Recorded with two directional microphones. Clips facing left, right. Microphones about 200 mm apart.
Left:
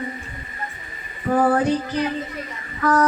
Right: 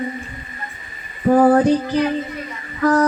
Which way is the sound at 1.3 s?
35° right (ahead or behind).